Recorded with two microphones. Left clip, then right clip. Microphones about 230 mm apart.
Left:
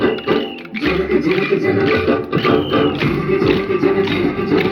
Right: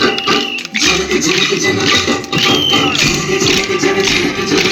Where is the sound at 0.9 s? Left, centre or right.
Right.